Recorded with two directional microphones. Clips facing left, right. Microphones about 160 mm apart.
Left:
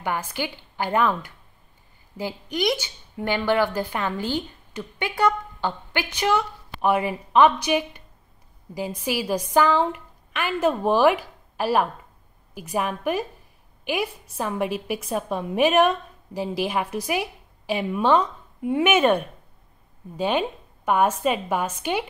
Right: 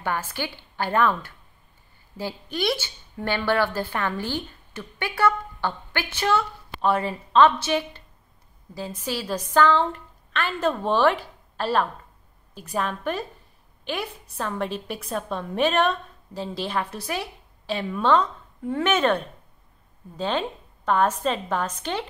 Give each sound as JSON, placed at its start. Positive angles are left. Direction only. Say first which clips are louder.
{"t": 0.0, "sound": "a woman's voice", "louder": "left 1 dB", "side_deg": 15}
{"t": 9.0, "sound": "a woman's voice", "louder": "left 3 dB", "side_deg": 10}